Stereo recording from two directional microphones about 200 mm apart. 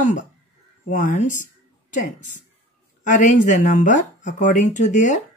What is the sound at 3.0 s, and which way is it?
Speech, 40° left (ahead or behind).